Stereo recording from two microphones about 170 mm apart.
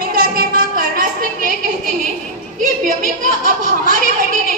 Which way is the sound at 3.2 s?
50° right (ahead or behind).